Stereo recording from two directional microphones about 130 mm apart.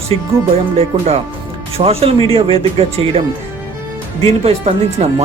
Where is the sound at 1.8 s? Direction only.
50° right (ahead or behind).